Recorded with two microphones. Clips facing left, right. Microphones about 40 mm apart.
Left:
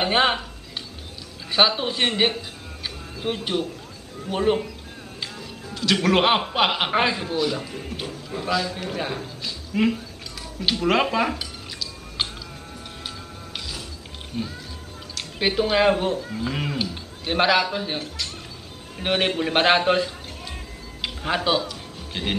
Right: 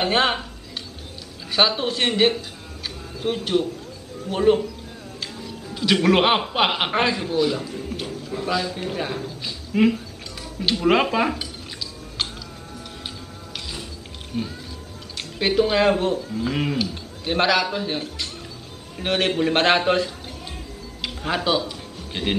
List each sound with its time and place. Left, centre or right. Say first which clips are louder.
0.0 s a man's voice: even; centre
1.5 s a man's voice: even; centre
5.2 s music: right 1 dB; centre
5.8 s a man's voice: right 2 dB; centre
7.6 s a man's voice: right 2 dB; centre
9.4 s music: right 3 dB; centre
10.9 s a man's voice: right 2 dB; centre
12.2 s music: even; centre
14.3 s speech: right 2 dB; centre
15.3 s a man's voice: right 2 dB; centre
20.5 s music: right 1 dB; centre
21.6 s music: right 1 dB; centre